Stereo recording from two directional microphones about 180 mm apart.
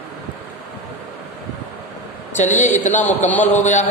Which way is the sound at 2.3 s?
40° left (ahead or behind).